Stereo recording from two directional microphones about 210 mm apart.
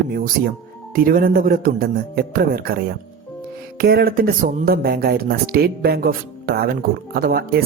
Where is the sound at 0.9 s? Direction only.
45° right (ahead or behind).